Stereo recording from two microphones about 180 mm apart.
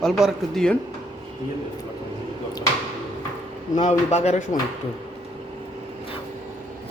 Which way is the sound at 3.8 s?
40° left (ahead or behind).